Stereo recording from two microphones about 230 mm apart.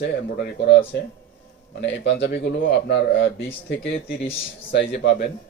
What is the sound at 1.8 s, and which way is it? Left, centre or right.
Speech, left.